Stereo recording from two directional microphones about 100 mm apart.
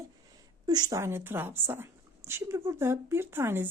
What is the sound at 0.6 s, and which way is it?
Speech, 45° right (ahead or behind).